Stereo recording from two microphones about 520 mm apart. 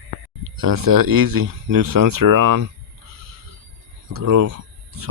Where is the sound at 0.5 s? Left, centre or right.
Right.